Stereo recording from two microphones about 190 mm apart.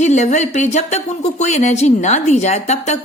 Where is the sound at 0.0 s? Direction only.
40° left (ahead or behind).